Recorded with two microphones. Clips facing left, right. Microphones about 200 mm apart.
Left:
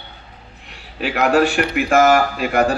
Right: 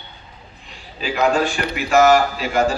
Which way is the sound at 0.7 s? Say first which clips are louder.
Left 2 dB; 65° left (ahead or behind).